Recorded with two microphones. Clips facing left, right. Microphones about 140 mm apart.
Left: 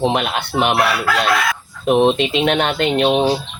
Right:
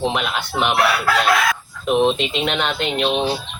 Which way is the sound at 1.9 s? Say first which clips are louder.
Left 3 dB; 50° left (ahead or behind).